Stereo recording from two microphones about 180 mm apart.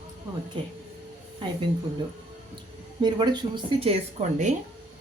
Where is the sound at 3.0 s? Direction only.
25° right (ahead or behind).